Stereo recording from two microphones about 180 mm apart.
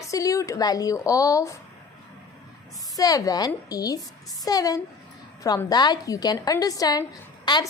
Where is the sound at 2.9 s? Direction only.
20° left (ahead or behind).